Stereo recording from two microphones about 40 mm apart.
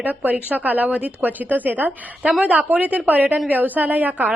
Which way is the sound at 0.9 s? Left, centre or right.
Right.